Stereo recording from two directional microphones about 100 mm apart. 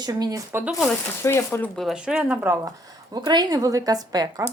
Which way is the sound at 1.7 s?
5° right (ahead or behind).